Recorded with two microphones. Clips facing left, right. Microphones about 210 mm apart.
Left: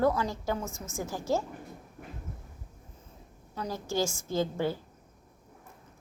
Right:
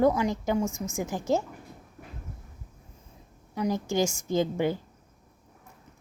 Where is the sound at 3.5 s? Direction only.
15° right (ahead or behind).